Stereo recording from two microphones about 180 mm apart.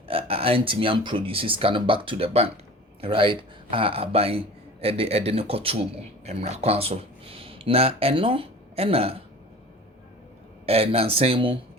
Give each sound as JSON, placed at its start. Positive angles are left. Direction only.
{"t": 0.1, "sound": "a man's voice", "side_deg": -30}
{"t": 10.7, "sound": "speech", "side_deg": -30}